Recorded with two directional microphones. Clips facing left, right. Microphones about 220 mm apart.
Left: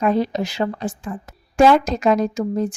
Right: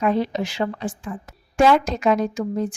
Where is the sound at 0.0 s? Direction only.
40° left (ahead or behind).